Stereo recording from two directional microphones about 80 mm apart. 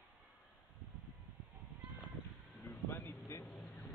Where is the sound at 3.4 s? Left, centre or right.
Centre.